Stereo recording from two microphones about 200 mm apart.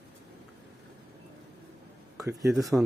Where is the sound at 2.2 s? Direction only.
15° right (ahead or behind).